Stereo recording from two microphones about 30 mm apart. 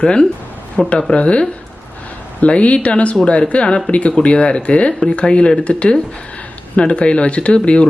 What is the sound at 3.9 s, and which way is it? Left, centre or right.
Speech, left.